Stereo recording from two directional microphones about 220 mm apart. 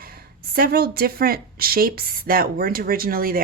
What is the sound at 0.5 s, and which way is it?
Speech, 45° right (ahead or behind).